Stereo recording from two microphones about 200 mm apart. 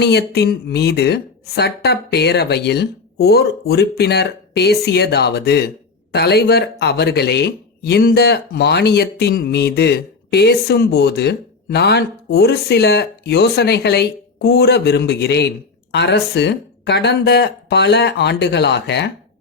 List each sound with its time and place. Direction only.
0.0 s a woman's voice: 55° left (ahead or behind)